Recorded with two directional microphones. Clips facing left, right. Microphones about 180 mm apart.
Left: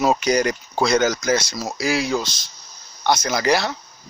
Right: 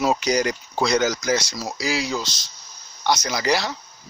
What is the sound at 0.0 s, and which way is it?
Speech, 50° left (ahead or behind).